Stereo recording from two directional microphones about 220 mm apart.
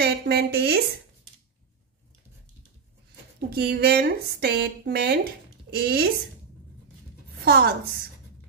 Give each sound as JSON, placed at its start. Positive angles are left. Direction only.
{"t": 0.0, "sound": "speech", "side_deg": -45}
{"t": 3.3, "sound": "speech", "side_deg": -45}
{"t": 7.4, "sound": "speech", "side_deg": -50}